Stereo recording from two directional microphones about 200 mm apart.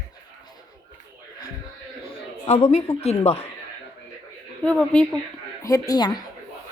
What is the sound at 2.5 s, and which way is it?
Speech, 30° left (ahead or behind).